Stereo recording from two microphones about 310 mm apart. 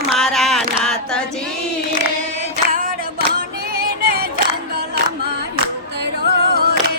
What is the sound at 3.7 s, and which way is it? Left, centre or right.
Music, right.